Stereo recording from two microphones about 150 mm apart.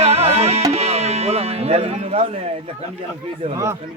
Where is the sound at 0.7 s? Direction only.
45° right (ahead or behind).